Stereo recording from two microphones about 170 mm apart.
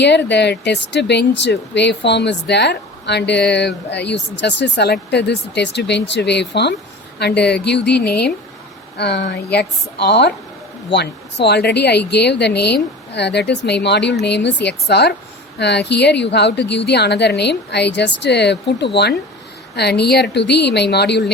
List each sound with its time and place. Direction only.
0.0 s speech: 90° left
7.2 s speech: 75° left (ahead or behind)